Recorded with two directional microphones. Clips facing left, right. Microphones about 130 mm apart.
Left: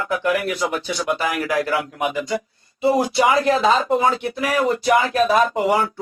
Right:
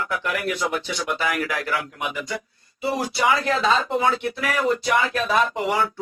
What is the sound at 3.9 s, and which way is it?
Speech, 40° left (ahead or behind).